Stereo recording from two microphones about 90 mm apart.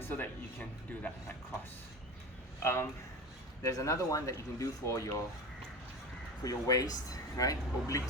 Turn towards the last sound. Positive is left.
turn(degrees=40)  # may be behind; listen again after turning